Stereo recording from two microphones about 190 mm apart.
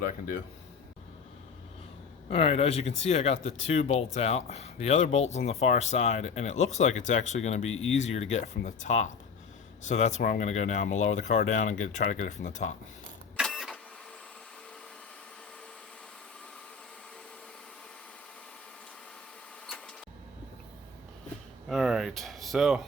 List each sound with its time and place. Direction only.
2.3 s speech: 30° left (ahead or behind)
13.3 s printer: centre (ahead or behind)
21.7 s speech: centre (ahead or behind)